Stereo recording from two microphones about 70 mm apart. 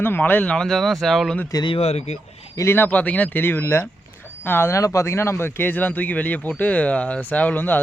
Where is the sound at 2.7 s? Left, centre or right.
Left.